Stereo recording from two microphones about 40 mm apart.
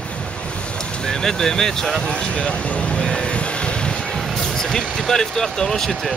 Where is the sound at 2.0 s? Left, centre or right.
Left.